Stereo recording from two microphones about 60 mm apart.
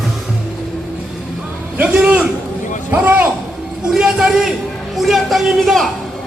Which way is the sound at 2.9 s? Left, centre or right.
Right.